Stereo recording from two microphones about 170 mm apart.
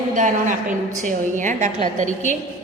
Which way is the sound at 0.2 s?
50° right (ahead or behind).